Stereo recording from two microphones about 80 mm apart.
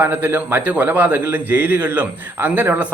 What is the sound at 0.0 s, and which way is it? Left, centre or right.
A man's voice, right.